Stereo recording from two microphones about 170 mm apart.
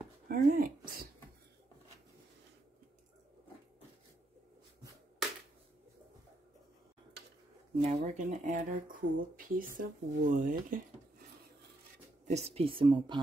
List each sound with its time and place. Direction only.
0.3 s speech: 55° right (ahead or behind)
7.8 s speech: 45° right (ahead or behind)
12.3 s speech: 40° right (ahead or behind)